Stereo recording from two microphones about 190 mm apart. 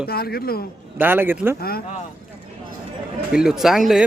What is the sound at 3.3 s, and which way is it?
Speech, 5° right (ahead or behind).